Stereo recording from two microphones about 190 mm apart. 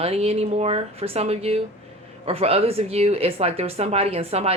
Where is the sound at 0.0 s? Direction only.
30° right (ahead or behind).